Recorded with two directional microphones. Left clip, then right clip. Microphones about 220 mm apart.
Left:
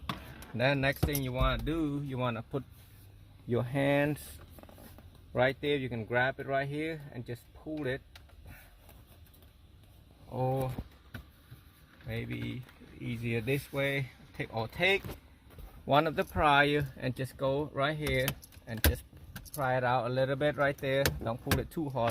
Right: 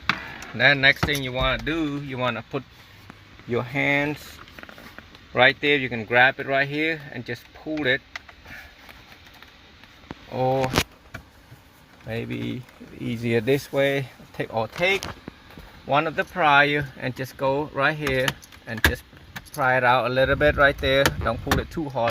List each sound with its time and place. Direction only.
0.5 s speech: 5° left (ahead or behind)
5.3 s speech: centre (ahead or behind)
10.3 s speech: 15° right (ahead or behind)
12.0 s speech: 20° right (ahead or behind)
15.9 s speech: 15° left (ahead or behind); by 22.1 s 5° right (ahead or behind)